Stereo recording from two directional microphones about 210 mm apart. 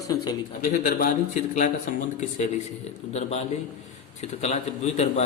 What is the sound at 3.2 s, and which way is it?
A man's voice, 30° left (ahead or behind).